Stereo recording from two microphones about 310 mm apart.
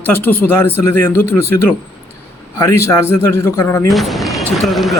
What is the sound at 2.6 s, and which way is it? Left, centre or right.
A man's voice, centre.